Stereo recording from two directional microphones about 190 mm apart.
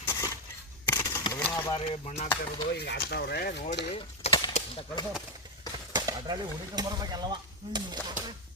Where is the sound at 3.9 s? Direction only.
30° left (ahead or behind).